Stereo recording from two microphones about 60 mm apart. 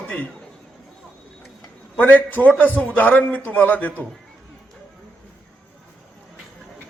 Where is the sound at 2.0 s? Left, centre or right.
Left.